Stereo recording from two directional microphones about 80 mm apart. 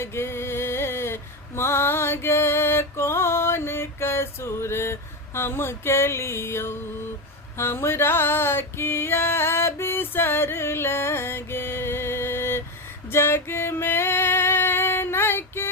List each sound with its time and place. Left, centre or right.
0.0 s a sound: left
7.5 s female singing: left
13.1 s music: left